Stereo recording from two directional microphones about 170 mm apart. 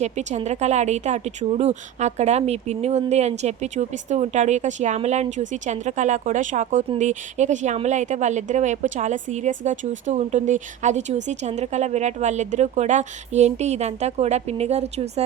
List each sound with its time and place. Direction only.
0.0 s speech: 40° right (ahead or behind)